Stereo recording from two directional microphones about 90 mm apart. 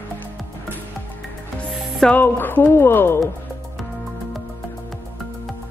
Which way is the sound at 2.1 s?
20° left (ahead or behind).